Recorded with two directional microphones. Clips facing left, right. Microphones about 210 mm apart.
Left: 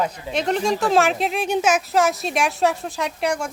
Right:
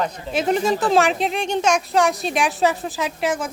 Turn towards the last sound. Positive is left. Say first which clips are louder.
# right 1 dB
turn(degrees=0)  # may be behind; listen again after turning